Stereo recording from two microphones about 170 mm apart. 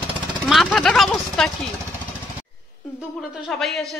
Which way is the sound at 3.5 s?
5° left (ahead or behind).